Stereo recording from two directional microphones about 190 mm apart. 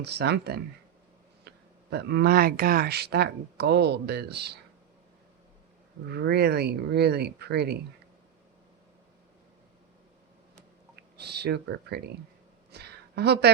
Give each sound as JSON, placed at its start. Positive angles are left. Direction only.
{"t": 0.0, "sound": "speech", "side_deg": -60}
{"t": 6.1, "sound": "speech", "side_deg": -60}
{"t": 11.2, "sound": "speech", "side_deg": -60}
{"t": 12.7, "sound": "a sound", "side_deg": -60}